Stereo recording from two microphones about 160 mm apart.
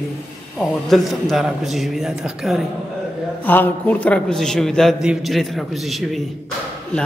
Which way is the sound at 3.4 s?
10° left (ahead or behind).